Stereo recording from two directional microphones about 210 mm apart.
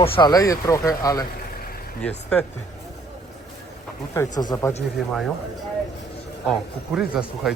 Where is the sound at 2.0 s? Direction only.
5° left (ahead or behind).